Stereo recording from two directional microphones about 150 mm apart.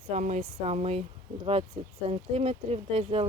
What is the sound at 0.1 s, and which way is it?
Speech, 50° right (ahead or behind).